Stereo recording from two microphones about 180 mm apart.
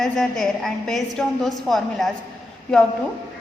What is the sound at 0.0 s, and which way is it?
A woman's voice, centre (ahead or behind).